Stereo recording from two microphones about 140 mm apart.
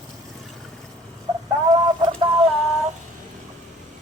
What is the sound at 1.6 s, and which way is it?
Chicken, 30° right (ahead or behind).